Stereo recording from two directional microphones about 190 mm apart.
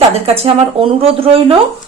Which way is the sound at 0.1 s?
35° right (ahead or behind).